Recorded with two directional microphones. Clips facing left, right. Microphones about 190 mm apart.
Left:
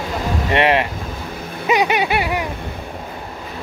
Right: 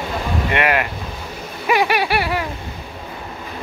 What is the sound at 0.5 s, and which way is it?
Speech, 25° left (ahead or behind).